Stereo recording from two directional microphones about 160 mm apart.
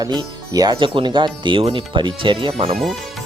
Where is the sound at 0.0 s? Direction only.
25° right (ahead or behind).